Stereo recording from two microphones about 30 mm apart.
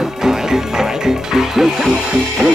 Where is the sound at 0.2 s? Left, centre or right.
Centre.